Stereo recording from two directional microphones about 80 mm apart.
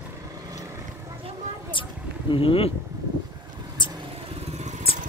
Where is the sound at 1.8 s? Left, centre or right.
Left.